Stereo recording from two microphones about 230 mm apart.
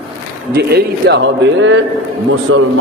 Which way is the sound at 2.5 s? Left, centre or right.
Right.